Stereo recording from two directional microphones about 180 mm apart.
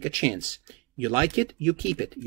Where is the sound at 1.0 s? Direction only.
35° right (ahead or behind).